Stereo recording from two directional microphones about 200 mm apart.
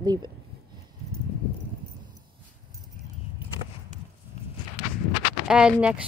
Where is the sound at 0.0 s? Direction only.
20° right (ahead or behind).